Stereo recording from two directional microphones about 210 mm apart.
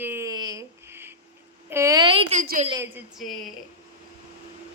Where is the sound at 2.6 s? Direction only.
15° right (ahead or behind).